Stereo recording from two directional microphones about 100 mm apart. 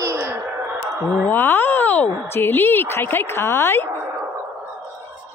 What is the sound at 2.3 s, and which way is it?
Speech, 25° left (ahead or behind).